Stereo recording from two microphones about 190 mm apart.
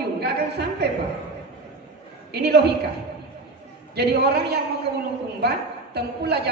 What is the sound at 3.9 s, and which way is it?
A man's voice, 60° right (ahead or behind).